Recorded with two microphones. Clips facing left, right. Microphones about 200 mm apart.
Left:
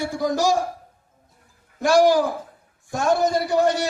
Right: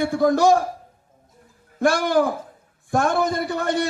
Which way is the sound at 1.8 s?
55° right (ahead or behind).